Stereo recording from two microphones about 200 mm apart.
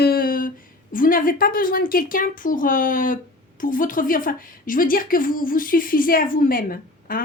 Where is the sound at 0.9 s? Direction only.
45° left (ahead or behind).